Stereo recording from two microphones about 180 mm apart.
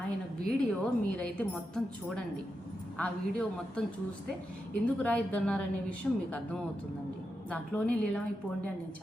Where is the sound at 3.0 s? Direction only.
5° left (ahead or behind).